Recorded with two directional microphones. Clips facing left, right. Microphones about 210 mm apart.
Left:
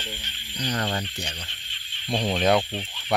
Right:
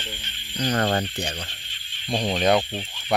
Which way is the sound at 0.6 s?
55° right (ahead or behind).